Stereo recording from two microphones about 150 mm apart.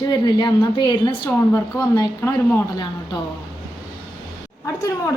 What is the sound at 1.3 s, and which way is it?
Speech, 15° left (ahead or behind).